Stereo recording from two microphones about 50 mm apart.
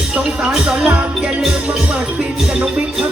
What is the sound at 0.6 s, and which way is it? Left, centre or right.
Music, right.